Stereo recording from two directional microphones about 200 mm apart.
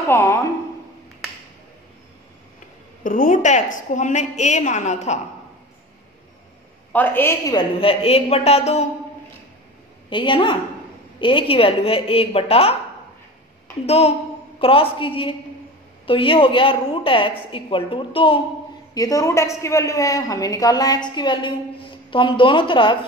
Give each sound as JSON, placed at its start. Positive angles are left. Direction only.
{"t": 0.1, "sound": "a man's voice", "side_deg": 10}
{"t": 3.0, "sound": "a woman's voice", "side_deg": 40}
{"t": 6.9, "sound": "a woman's voice", "side_deg": 10}
{"t": 10.0, "sound": "a woman's voice", "side_deg": 25}
{"t": 13.8, "sound": "a woman's voice", "side_deg": 30}